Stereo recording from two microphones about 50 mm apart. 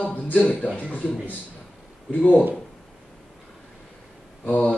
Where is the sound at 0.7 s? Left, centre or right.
Right.